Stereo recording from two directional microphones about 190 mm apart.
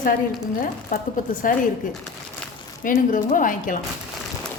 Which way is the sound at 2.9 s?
45° left (ahead or behind).